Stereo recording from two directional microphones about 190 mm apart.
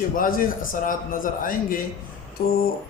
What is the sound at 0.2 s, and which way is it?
A man's voice, 45° left (ahead or behind).